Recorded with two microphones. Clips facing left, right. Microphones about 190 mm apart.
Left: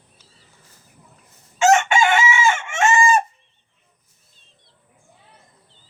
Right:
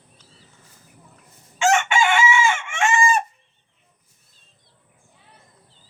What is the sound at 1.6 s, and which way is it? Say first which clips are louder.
Chicken: left 3 dB; 40° left (ahead or behind).